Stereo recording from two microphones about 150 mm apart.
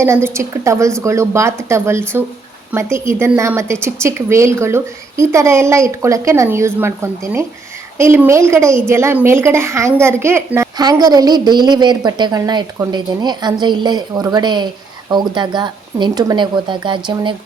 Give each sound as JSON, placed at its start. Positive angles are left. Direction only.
{"t": 0.0, "sound": "a woman's voice", "side_deg": -15}